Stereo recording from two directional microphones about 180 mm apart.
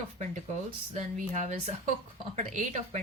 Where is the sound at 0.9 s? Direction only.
40° right (ahead or behind).